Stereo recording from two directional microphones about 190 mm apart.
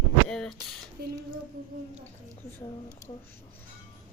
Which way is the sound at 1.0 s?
55° right (ahead or behind).